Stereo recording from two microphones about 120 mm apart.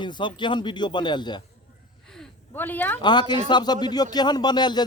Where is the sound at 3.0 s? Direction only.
40° left (ahead or behind).